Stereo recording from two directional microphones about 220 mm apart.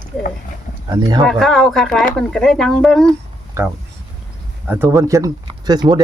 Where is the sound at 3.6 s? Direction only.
10° right (ahead or behind).